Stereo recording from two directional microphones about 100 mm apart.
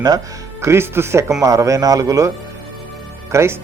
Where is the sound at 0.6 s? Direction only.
25° right (ahead or behind).